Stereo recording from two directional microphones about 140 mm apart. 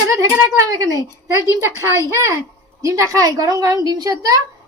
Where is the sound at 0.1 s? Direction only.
20° right (ahead or behind).